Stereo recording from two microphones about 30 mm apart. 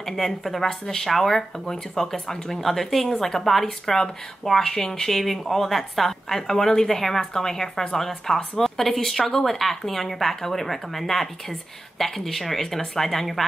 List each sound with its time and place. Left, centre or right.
0.0 s speech: centre
0.7 s speech: centre
4.7 s speech: left
5.1 s speech: centre